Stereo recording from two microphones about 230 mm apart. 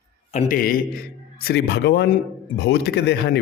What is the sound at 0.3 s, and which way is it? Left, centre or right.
A man's voice, left.